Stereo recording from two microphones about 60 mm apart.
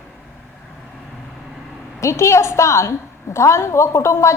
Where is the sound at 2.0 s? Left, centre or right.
Left.